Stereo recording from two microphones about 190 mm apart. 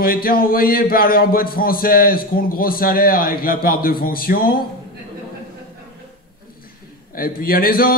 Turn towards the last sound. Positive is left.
turn(degrees=50)  # may be behind; listen again after turning